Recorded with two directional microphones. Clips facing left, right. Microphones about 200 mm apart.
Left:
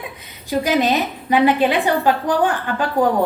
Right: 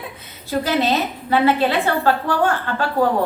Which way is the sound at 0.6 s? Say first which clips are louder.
Left 2 dB; 15° left (ahead or behind).